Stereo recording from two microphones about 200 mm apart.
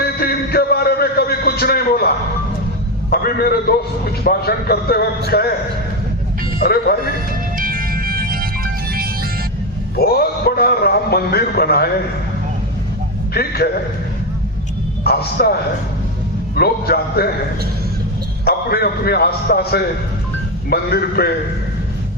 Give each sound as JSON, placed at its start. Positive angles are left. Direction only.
{"t": 0.0, "sound": "a sound", "side_deg": 50}
{"t": 3.1, "sound": "a man's voice", "side_deg": 50}
{"t": 6.6, "sound": "a man's voice", "side_deg": 50}
{"t": 7.5, "sound": "music", "side_deg": -45}
{"t": 9.9, "sound": "a man's voice", "side_deg": 50}
{"t": 13.3, "sound": "a man's voice", "side_deg": 50}
{"t": 15.0, "sound": "a man's voice", "side_deg": 50}
{"t": 16.6, "sound": "a man's voice", "side_deg": 50}
{"t": 18.4, "sound": "a man's voice", "side_deg": 50}